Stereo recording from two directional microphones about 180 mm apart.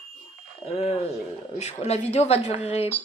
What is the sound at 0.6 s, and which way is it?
Speech, 35° left (ahead or behind).